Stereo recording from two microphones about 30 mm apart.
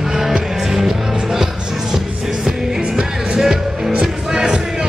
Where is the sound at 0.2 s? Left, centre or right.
Centre.